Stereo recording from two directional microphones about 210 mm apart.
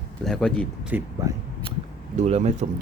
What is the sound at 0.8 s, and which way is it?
Speech, 10° right (ahead or behind).